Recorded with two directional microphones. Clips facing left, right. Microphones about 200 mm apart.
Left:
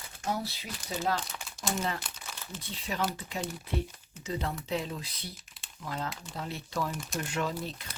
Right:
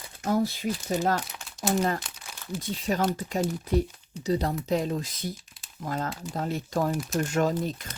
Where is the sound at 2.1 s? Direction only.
10° right (ahead or behind).